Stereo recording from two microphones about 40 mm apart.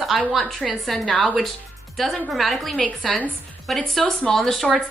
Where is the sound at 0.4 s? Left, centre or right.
Centre.